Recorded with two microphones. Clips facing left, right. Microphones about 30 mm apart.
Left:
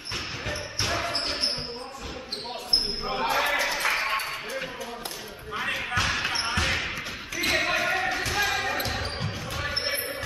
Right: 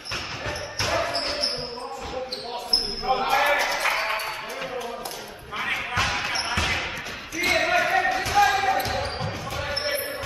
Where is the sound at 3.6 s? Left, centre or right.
Centre.